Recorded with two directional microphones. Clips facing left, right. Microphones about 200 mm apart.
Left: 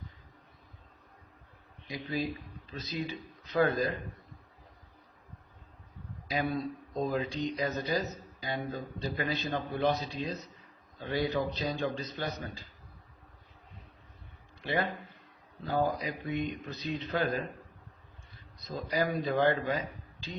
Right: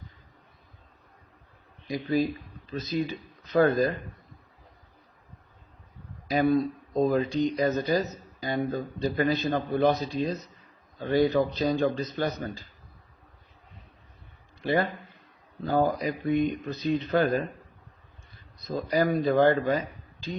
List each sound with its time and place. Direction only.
1.9 s speech: 45° right (ahead or behind)
6.2 s speech: 50° right (ahead or behind)
14.6 s a man's voice: 40° right (ahead or behind)
18.7 s speech: 45° right (ahead or behind)